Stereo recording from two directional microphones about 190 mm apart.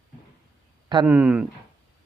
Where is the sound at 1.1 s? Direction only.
10° right (ahead or behind).